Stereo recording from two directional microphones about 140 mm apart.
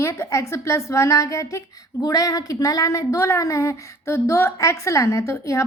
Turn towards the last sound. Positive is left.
turn(degrees=20)  # may be behind; listen again after turning